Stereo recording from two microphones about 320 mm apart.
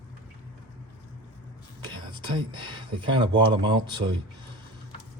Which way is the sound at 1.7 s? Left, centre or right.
Centre.